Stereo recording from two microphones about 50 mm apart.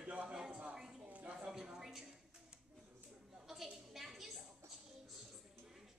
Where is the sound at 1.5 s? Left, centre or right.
Centre.